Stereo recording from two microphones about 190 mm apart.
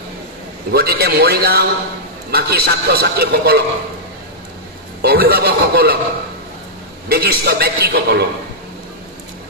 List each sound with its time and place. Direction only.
0.7 s a man's voice: 55° right (ahead or behind)
5.0 s a man's voice: 55° right (ahead or behind)
7.1 s a man's voice: 55° right (ahead or behind)